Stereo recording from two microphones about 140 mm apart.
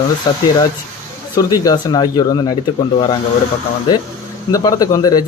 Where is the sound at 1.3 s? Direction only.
25° left (ahead or behind).